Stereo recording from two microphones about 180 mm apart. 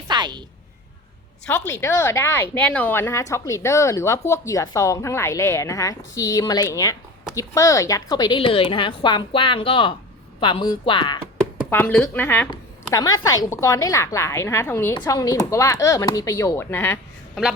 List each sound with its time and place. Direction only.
0.1 s a sound: 25° right (ahead or behind)
1.5 s a woman's voice: 10° left (ahead or behind)
11.7 s a woman's voice: 10° left (ahead or behind)
12.5 s a woman's voice: 20° left (ahead or behind)